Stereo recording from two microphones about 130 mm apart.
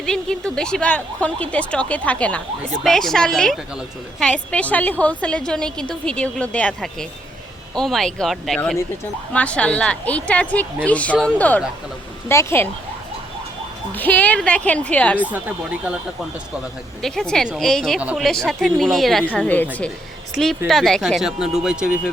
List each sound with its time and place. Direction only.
0.0 s a woman's voice: 5° left (ahead or behind)
13.9 s a woman's voice: 10° left (ahead or behind)
15.2 s speech: 10° right (ahead or behind)
17.0 s speech: 5° left (ahead or behind)
19.3 s a woman's voice: 10° left (ahead or behind)
20.3 s speech: centre (ahead or behind)